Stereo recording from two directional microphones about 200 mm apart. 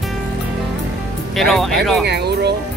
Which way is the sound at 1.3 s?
Centre (ahead or behind).